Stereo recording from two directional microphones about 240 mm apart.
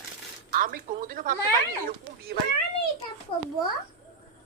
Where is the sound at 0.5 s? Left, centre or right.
Right.